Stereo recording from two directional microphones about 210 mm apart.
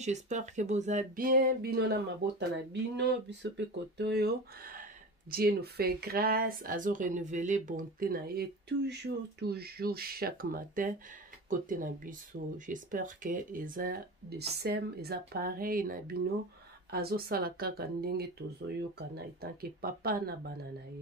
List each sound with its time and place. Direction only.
0.0 s speech: 35° right (ahead or behind)
19.4 s speech: 45° right (ahead or behind)